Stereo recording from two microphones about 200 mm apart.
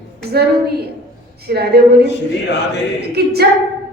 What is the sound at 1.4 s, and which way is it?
Speech, 50° right (ahead or behind).